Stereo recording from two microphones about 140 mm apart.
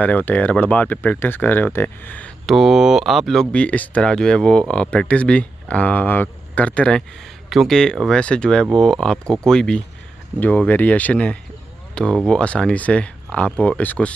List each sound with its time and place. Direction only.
0.0 s speech: 10° left (ahead or behind)
2.4 s speech: centre (ahead or behind)